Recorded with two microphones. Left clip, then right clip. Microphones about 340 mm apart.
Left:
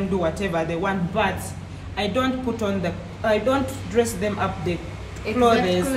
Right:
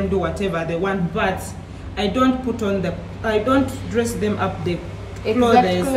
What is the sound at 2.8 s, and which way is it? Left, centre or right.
Speech, centre.